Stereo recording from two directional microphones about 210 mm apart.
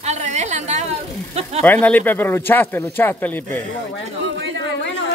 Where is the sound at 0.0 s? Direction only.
35° right (ahead or behind).